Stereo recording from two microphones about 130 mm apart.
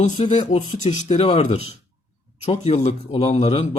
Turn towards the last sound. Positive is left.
turn(degrees=55)  # may be behind; listen again after turning